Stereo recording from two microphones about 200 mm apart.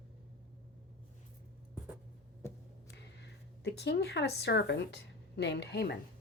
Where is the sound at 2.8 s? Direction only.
55° left (ahead or behind).